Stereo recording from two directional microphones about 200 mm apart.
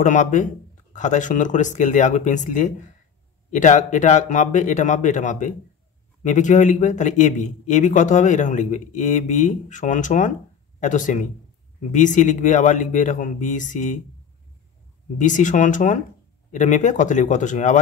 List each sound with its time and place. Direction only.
0.0 s a man's voice: 40° left (ahead or behind)
15.1 s a man's voice: 40° left (ahead or behind)